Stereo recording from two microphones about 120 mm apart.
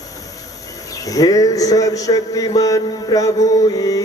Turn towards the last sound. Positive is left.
turn(degrees=30)  # may be behind; listen again after turning